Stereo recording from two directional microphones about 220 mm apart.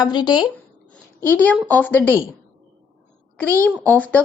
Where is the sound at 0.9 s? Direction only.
5° left (ahead or behind).